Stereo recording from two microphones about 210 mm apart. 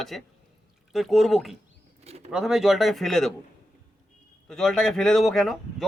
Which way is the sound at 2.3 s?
Centre (ahead or behind).